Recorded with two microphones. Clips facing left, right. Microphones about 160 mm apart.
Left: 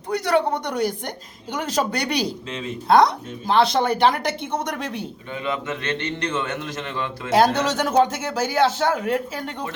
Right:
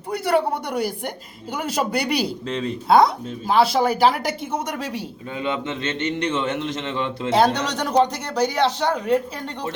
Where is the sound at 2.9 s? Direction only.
5° right (ahead or behind).